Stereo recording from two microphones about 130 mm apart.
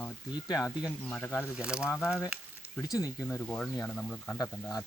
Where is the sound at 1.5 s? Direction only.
5° right (ahead or behind).